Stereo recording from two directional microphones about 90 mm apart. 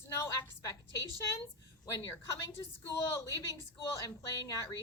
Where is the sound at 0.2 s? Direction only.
35° left (ahead or behind).